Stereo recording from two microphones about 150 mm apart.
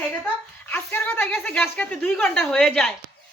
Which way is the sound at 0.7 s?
15° left (ahead or behind).